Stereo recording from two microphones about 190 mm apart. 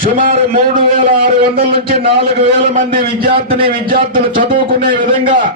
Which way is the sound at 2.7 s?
45° right (ahead or behind).